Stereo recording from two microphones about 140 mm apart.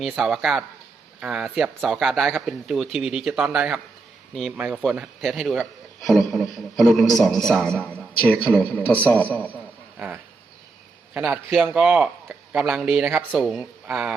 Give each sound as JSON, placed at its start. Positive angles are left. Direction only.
{"t": 0.2, "sound": "a man's voice", "side_deg": -5}
{"t": 11.1, "sound": "a man's voice", "side_deg": -5}